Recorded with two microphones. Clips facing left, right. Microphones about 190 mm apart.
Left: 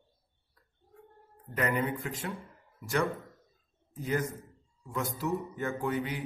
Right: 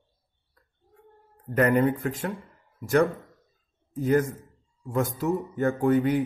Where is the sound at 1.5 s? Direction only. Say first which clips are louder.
Right 9 dB; 45° right (ahead or behind).